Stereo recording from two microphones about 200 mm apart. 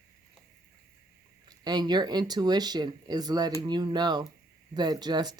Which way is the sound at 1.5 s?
20° right (ahead or behind).